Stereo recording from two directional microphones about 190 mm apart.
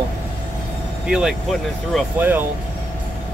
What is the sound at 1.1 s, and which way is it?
Speech, 5° right (ahead or behind).